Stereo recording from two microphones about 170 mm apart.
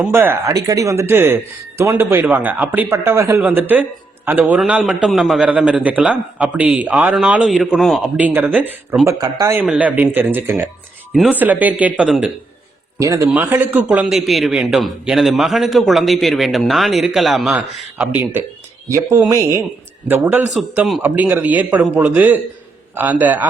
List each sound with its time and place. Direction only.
0.0 s a man's voice: 10° right (ahead or behind)
9.6 s a man's voice: 10° right (ahead or behind)
13.0 s a man's voice: 15° right (ahead or behind)